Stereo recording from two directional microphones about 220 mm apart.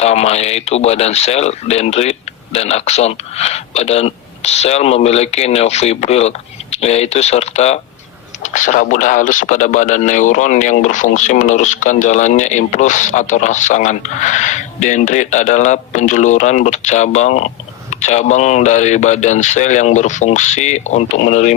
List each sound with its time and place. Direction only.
0.0 s speech: 30° left (ahead or behind)